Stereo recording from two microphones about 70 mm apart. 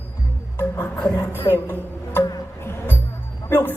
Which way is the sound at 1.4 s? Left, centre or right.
Left.